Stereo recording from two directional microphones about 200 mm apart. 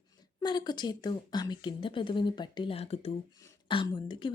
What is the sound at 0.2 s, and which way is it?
Speech, 20° left (ahead or behind).